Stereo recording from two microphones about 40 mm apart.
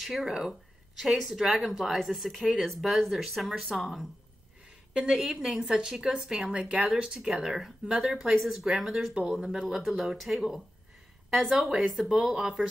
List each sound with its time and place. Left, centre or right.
0.0 s speech: centre
4.9 s speech: centre
7.4 s speech: centre